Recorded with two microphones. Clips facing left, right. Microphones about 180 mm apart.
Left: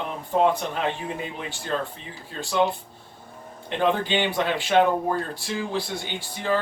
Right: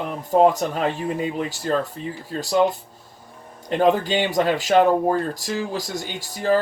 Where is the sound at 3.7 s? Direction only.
40° right (ahead or behind).